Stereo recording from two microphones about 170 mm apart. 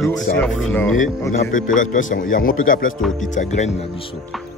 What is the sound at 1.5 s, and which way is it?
A man's voice, 50° left (ahead or behind).